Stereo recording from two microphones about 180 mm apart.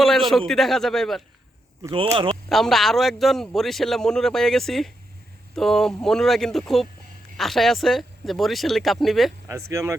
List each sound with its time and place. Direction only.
0.0 s speech: centre (ahead or behind)
1.8 s speech: 25° right (ahead or behind)
2.3 s speech: centre (ahead or behind)
9.5 s speech: 15° right (ahead or behind)